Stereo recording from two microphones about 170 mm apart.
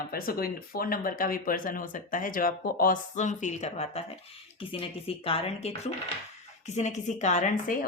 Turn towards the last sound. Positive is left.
turn(degrees=45)  # may be behind; listen again after turning